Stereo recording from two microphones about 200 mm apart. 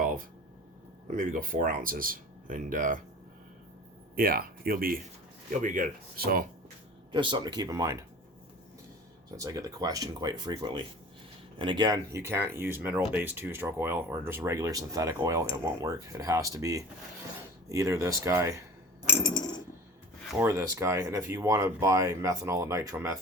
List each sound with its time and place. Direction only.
0.0 s a sound: 45° right (ahead or behind)
1.1 s speech: 45° right (ahead or behind)
4.1 s speech: 50° right (ahead or behind)
7.1 s speech: 25° right (ahead or behind)
9.3 s speech: 15° right (ahead or behind)
19.0 s coin: 10° left (ahead or behind)
20.4 s speech: 15° right (ahead or behind)